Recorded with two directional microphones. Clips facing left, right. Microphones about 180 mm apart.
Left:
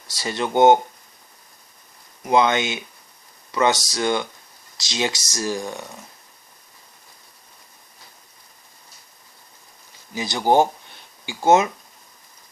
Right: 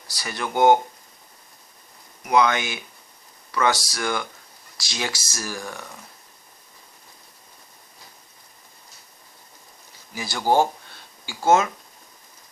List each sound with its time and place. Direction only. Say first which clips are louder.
0.1 s speech: left 5 dB; 25° left (ahead or behind)
2.2 s speech: left 2 dB; 25° left (ahead or behind)
10.2 s speech: left 3 dB; 20° left (ahead or behind)